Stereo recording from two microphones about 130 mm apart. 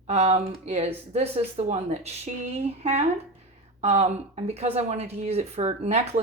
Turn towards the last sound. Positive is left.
turn(degrees=-55)  # may be behind; listen again after turning